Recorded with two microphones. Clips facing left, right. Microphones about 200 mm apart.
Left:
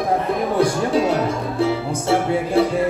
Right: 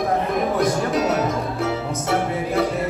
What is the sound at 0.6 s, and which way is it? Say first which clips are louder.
Music: left 2 dB; 30° left (ahead or behind).